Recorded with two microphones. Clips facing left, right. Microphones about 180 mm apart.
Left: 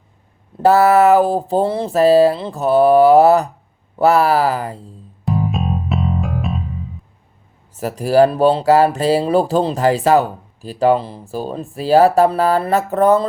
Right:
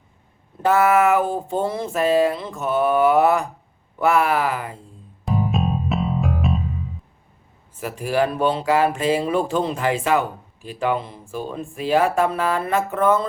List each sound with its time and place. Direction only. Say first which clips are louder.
0.6 s speech: left 5 dB; 35° left (ahead or behind)
5.2 s music: left 2 dB; centre (ahead or behind)
7.8 s speech: left 8 dB; 40° left (ahead or behind)